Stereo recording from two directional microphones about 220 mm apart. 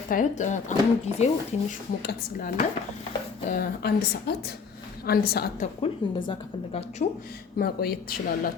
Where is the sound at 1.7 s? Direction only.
45° left (ahead or behind).